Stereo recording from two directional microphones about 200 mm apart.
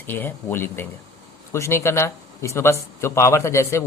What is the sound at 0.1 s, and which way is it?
A man's voice, 10° left (ahead or behind).